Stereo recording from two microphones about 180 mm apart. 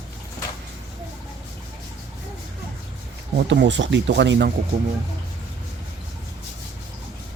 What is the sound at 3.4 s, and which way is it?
Speech, 75° right (ahead or behind).